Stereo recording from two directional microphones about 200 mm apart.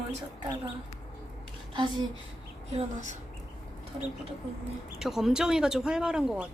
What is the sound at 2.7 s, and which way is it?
Speech, 40° right (ahead or behind).